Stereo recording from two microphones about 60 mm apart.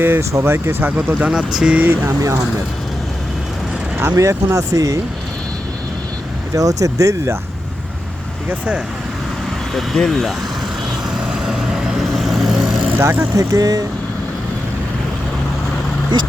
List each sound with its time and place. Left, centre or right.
0.0 s speech: right
0.9 s speech: right
1.3 s speech: centre
3.9 s speech: right
4.2 s speech: right
6.5 s speech: right
8.4 s speech: right
9.7 s speech: centre
11.3 s vehicle: centre
13.0 s speech: right